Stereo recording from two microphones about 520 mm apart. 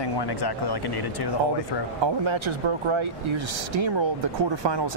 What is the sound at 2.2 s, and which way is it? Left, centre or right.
Speech, right.